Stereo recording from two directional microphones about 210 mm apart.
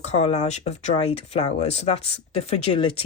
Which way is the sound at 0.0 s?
30° left (ahead or behind).